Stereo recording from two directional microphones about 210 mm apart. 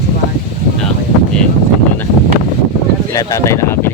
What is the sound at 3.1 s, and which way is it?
Speech, 15° left (ahead or behind).